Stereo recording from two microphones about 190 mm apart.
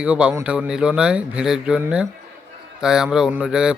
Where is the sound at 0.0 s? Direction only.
5° right (ahead or behind).